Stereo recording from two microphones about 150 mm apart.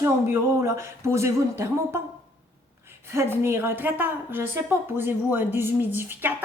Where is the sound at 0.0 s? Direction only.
20° right (ahead or behind).